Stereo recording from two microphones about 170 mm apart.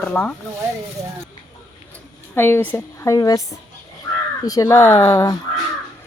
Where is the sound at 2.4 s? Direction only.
15° left (ahead or behind).